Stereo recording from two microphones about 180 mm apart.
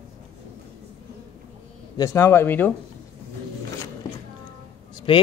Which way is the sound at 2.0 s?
15° left (ahead or behind).